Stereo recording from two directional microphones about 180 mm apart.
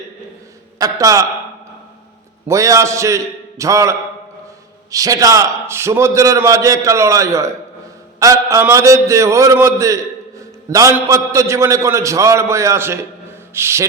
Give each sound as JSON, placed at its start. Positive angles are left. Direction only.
{"t": 0.8, "sound": "a man's voice", "side_deg": -20}
{"t": 2.5, "sound": "a man's voice", "side_deg": -15}